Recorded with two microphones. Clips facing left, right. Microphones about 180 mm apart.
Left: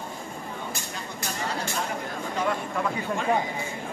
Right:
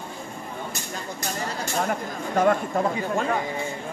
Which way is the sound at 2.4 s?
45° right (ahead or behind).